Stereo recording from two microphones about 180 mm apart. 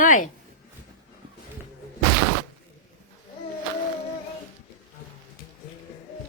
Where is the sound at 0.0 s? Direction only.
50° left (ahead or behind).